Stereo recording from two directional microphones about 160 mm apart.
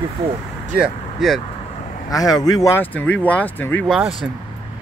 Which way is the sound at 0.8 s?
Centre (ahead or behind).